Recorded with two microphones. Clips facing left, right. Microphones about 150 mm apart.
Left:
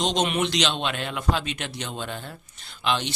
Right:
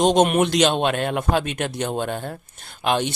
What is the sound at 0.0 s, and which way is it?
A man's voice, 50° right (ahead or behind).